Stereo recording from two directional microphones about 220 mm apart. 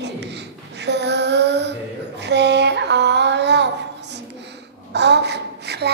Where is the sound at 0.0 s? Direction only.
50° right (ahead or behind).